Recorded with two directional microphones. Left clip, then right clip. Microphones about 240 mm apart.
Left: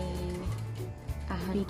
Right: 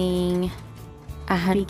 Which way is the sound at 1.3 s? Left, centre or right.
Right.